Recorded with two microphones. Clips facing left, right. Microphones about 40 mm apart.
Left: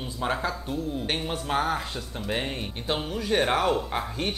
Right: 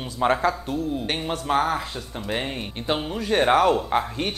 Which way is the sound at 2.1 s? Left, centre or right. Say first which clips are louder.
Right 2 dB; centre.